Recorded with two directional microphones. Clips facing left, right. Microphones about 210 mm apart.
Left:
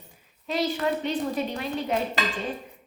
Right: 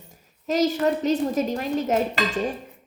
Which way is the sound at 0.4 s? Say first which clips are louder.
Right 5 dB; 40° right (ahead or behind).